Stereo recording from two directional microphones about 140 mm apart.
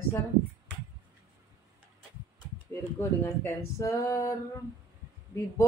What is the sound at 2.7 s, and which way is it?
Speech, 20° left (ahead or behind).